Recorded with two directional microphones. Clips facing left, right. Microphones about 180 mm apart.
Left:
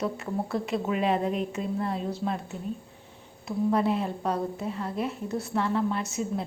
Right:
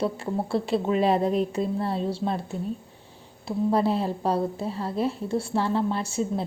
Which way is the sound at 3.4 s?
35° right (ahead or behind).